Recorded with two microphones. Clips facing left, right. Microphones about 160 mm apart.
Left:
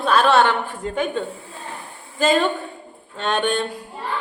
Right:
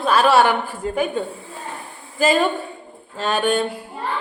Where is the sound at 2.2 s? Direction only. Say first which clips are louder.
Right 1 dB; 5° right (ahead or behind).